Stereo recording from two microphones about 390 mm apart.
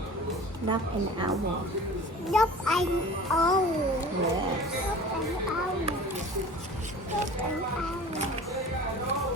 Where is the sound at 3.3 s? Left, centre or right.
Centre.